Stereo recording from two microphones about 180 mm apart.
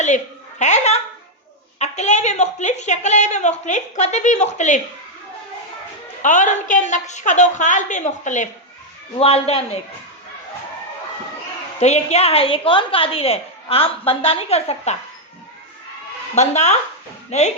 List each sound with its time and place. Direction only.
0.6 s a woman's voice: 40° left (ahead or behind)
6.2 s a woman's voice: 45° left (ahead or behind)
11.8 s a woman's voice: 40° left (ahead or behind)
16.3 s a woman's voice: 40° left (ahead or behind)